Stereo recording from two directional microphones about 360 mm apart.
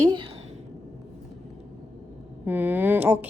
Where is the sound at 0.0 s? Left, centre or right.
Centre.